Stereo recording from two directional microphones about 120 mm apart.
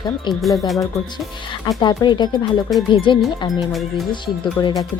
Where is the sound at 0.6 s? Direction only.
Centre (ahead or behind).